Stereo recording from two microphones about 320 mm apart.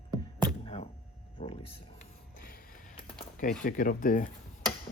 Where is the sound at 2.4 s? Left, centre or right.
Left.